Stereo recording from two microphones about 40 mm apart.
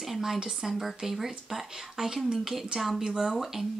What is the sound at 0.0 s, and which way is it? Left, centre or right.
Speech, centre.